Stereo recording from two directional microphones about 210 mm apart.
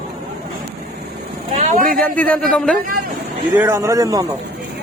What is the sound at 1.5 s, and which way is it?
Vehicle, 35° right (ahead or behind).